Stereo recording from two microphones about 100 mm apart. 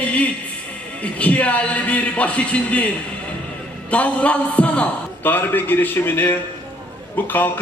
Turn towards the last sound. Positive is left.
turn(degrees=20)  # may be behind; listen again after turning